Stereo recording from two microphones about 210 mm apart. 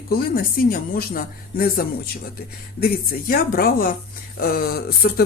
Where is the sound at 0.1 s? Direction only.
45° left (ahead or behind).